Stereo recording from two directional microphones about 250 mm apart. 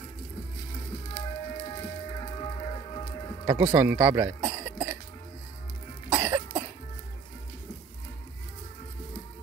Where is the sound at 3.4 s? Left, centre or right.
Centre.